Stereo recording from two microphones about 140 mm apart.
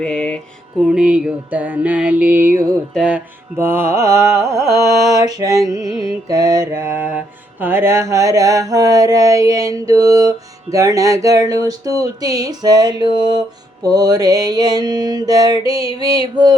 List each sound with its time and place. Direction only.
0.0 s music: 5° left (ahead or behind)
0.9 s music: 10° right (ahead or behind)
3.6 s mantra: 15° right (ahead or behind)
16.1 s female singing: 30° right (ahead or behind)